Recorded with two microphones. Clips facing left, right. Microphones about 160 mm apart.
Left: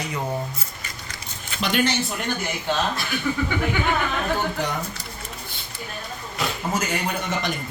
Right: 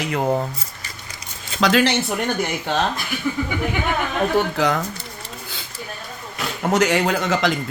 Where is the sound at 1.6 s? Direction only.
90° right.